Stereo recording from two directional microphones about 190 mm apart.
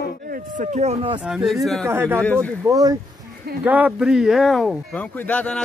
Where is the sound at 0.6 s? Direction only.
35° right (ahead or behind).